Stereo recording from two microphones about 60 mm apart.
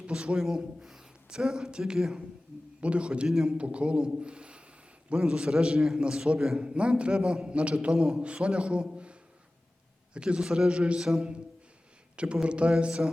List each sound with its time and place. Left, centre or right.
0.0 s a man's voice: centre
3.2 s a man's voice: centre
3.6 s a man's voice: centre
10.2 s a man's voice: centre